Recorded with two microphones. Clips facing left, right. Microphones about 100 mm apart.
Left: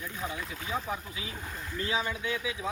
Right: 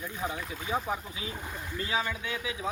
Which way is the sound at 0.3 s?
30° right (ahead or behind).